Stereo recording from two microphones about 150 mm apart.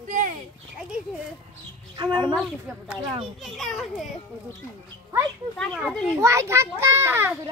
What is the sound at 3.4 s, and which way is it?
Speech, centre (ahead or behind).